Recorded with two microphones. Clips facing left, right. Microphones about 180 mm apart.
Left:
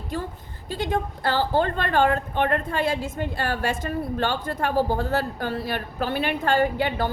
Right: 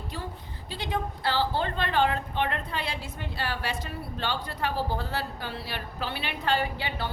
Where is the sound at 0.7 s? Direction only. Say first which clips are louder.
Left 6 dB; 45° left (ahead or behind).